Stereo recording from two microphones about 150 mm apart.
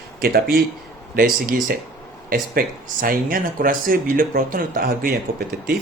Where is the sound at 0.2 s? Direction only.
85° right.